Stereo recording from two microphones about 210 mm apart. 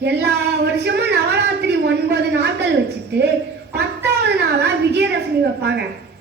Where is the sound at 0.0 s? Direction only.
55° right (ahead or behind).